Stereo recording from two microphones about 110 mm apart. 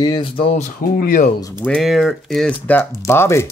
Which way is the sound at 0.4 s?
65° left (ahead or behind).